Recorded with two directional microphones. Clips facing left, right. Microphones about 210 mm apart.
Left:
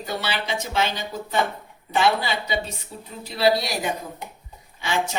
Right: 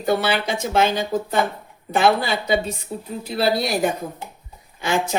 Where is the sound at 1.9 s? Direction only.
50° right (ahead or behind).